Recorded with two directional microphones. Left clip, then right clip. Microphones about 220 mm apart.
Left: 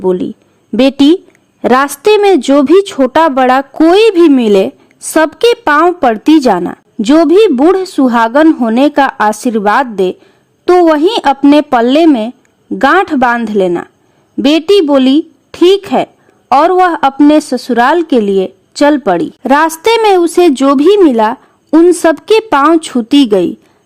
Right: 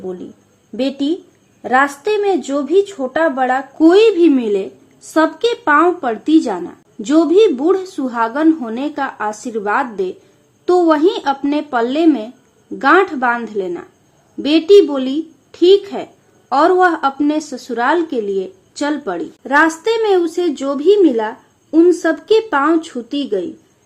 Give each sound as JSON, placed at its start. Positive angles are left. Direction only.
{"t": 0.8, "sound": "a woman's voice", "side_deg": 50}